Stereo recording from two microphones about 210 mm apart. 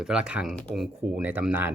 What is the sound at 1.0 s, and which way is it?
Speech, 5° right (ahead or behind).